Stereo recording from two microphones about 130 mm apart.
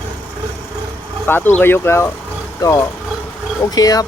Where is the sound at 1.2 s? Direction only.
15° left (ahead or behind).